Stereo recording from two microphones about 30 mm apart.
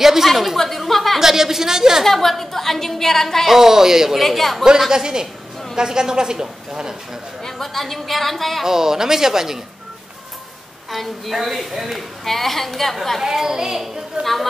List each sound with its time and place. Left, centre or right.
0.0 s a sound: centre
1.2 s a sound: centre
2.0 s a woman's voice: centre
3.5 s speech: centre
4.2 s a woman's voice: centre
4.8 s a woman's voice: right
7.5 s a woman's voice: centre
8.6 s speech: centre
10.9 s a woman's voice: centre
13.2 s speech: centre
14.2 s a woman's voice: right